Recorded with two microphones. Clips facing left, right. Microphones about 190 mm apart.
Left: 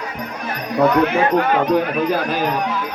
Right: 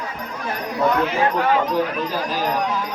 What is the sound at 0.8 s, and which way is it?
Speech, 60° left (ahead or behind).